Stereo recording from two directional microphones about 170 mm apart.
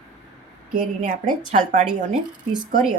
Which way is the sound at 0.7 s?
55° right (ahead or behind).